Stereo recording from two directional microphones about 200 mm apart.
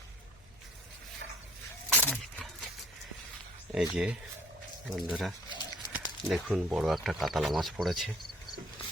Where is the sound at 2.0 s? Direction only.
10° left (ahead or behind).